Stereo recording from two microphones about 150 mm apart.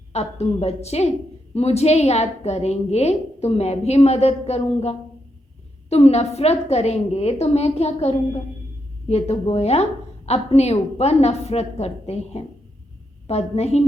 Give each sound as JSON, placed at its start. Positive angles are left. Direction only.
{"t": 0.1, "sound": "a woman's voice", "side_deg": 45}